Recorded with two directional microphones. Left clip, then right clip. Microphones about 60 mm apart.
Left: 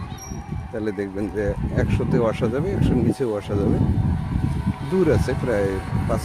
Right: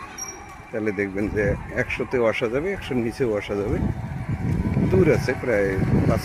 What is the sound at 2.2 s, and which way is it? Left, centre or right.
Speech, centre.